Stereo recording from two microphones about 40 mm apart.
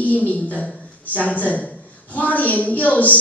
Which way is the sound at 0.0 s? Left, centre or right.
Left.